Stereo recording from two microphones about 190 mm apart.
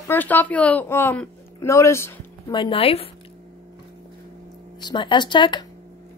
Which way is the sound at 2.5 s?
25° left (ahead or behind).